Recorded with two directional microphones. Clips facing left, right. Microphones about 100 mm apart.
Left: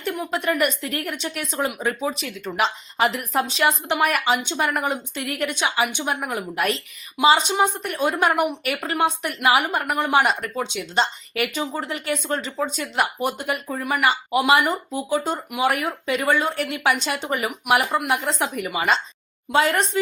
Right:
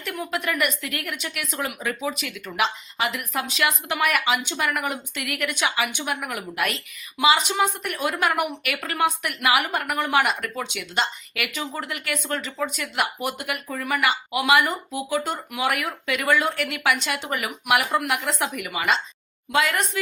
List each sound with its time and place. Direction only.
0.0 s a woman's voice: 25° left (ahead or behind)